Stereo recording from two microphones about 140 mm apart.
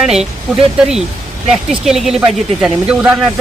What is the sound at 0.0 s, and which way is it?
Speech, 5° right (ahead or behind).